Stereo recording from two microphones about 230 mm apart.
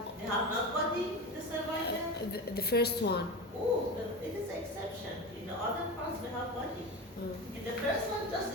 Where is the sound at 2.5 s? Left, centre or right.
Left.